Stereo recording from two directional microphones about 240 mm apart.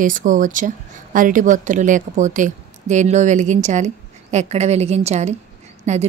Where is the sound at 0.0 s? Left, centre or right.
Right.